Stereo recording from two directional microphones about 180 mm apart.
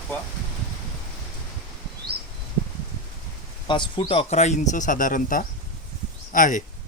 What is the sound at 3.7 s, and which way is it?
Speech, 25° left (ahead or behind).